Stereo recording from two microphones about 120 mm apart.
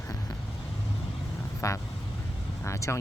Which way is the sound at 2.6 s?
25° left (ahead or behind).